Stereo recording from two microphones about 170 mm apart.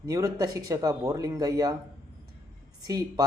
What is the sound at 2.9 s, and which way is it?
Speech, 20° right (ahead or behind).